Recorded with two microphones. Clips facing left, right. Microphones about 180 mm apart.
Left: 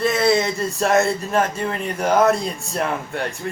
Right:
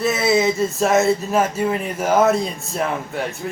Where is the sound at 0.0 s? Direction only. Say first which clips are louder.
Right 1 dB; 5° right (ahead or behind).